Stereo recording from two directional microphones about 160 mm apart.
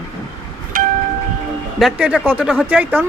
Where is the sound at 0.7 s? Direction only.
60° right (ahead or behind).